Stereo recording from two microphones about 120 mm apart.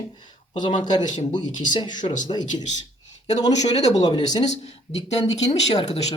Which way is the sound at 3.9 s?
35° left (ahead or behind).